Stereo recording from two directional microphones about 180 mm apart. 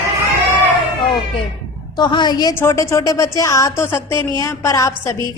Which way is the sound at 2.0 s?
25° left (ahead or behind).